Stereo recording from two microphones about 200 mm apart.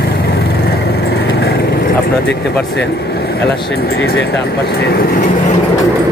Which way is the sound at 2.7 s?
55° left (ahead or behind).